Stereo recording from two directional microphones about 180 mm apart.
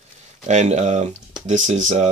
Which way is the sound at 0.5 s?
40° right (ahead or behind).